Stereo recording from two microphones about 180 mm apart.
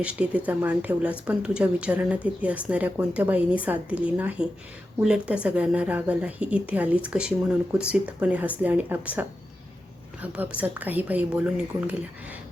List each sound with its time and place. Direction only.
0.0 s speech: 5° right (ahead or behind)